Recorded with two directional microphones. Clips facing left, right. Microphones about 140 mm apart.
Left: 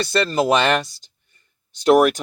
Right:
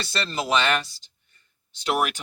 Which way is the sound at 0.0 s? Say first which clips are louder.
Left 10 dB; 50° left (ahead or behind).